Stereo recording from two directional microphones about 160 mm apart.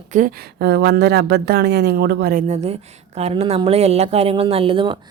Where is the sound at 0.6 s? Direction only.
90° right; by 2.5 s 70° right (ahead or behind).